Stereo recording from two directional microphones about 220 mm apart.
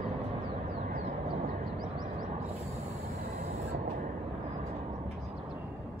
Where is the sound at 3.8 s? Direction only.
40° right (ahead or behind).